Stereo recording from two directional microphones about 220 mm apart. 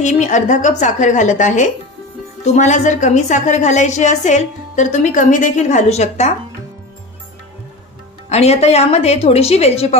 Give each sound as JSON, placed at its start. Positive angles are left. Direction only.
{"t": 0.0, "sound": "a woman's voice", "side_deg": 35}
{"t": 8.3, "sound": "a woman's voice", "side_deg": 30}